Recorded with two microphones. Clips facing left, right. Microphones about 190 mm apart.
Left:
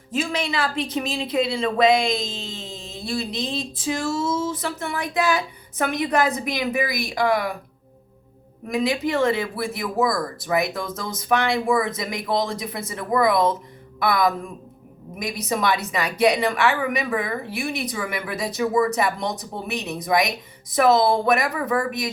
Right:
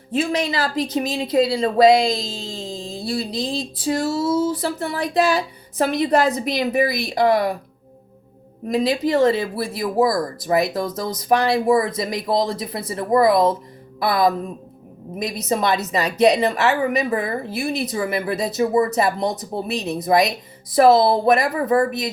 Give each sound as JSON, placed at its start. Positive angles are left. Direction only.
{"t": 0.2, "sound": "a woman's voice", "side_deg": -35}
{"t": 8.6, "sound": "a woman's voice", "side_deg": -30}